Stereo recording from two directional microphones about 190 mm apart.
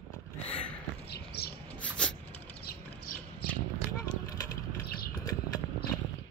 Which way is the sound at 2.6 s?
50° left (ahead or behind).